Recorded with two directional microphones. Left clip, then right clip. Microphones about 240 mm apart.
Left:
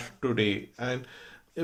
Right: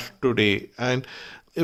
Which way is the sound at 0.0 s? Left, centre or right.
Right.